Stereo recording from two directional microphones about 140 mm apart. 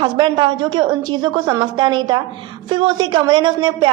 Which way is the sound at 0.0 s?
35° right (ahead or behind).